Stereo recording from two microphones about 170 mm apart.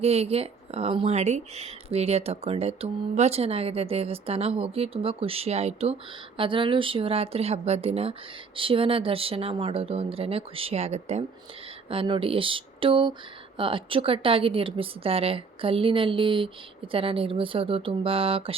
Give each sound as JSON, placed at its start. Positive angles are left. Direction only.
{"t": 0.0, "sound": "speech", "side_deg": -35}